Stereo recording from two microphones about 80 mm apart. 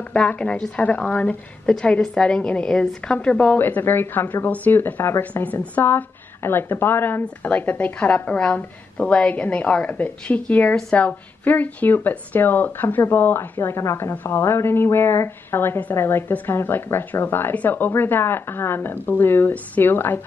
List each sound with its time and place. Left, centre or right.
0.1 s a woman's voice: centre
3.5 s speech: left
14.1 s speech: left